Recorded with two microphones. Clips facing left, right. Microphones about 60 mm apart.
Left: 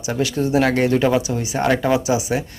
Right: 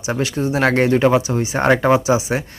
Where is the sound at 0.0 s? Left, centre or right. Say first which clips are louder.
Even; right.